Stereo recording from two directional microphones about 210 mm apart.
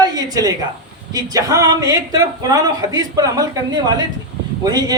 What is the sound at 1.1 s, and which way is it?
Speech, 15° right (ahead or behind).